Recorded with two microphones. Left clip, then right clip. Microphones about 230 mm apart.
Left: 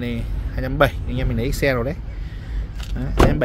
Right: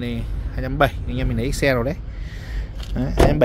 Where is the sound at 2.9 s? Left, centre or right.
Right.